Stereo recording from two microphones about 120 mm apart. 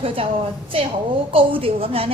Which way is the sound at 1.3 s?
50° right (ahead or behind).